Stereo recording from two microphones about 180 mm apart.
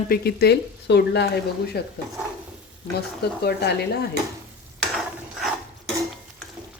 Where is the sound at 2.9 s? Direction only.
65° left (ahead or behind).